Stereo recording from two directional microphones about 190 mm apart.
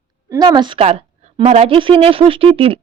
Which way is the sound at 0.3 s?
20° right (ahead or behind).